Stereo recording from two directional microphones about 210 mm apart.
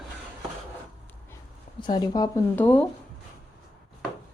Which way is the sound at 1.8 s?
20° left (ahead or behind).